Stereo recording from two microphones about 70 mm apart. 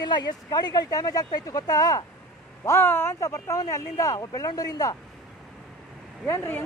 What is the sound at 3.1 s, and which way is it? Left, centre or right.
Speech, left.